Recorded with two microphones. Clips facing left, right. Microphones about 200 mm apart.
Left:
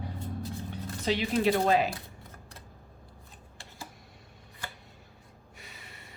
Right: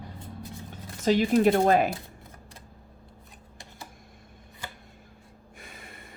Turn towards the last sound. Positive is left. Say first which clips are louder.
# right 4 dB
turn(degrees=-50)  # may be behind; listen again after turning